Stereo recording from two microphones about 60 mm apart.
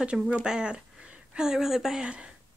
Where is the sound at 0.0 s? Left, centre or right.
Centre.